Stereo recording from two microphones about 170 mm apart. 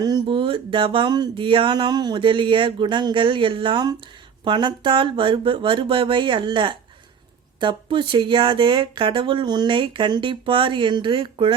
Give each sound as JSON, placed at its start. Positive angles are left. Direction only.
{"t": 0.0, "sound": "speech", "side_deg": -30}